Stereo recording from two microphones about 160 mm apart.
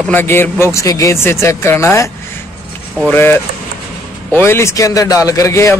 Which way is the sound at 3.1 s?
15° left (ahead or behind).